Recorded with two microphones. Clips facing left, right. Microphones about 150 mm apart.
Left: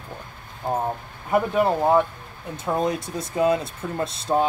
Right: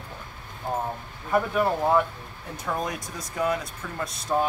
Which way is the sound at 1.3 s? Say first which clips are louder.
Left 3 dB; 20° left (ahead or behind).